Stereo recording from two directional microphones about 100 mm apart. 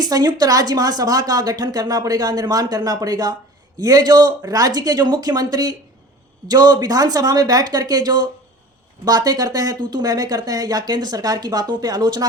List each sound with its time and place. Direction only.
0.0 s speech: 40° right (ahead or behind)